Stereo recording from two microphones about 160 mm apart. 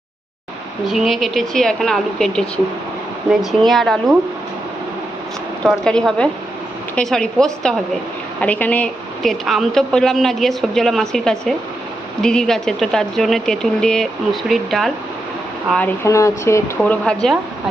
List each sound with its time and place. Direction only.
0.9 s a woman's voice: centre (ahead or behind)
5.6 s a woman's voice: 5° left (ahead or behind)
16.8 s speech: 5° left (ahead or behind)